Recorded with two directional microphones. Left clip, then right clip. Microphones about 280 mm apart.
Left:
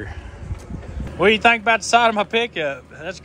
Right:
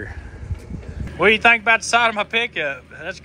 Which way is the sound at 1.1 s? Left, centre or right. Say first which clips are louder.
Right 1 dB; centre.